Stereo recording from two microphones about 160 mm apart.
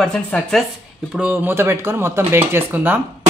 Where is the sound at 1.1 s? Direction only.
10° right (ahead or behind).